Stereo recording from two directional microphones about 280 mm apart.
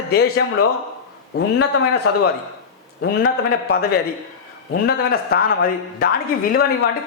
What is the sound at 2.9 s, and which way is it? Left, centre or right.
A man's voice, left.